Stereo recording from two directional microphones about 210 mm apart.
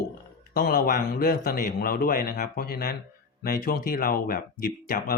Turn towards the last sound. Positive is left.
turn(degrees=45)  # may be behind; listen again after turning